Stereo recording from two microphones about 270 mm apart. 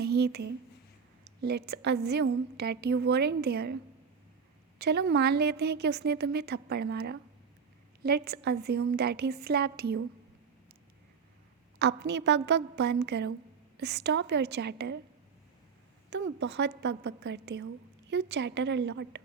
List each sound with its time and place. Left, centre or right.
0.0 s a sound: right
1.2 s a woman's voice: right
4.8 s a woman's voice: right
11.8 s a woman's voice: right
16.0 s a woman's voice: right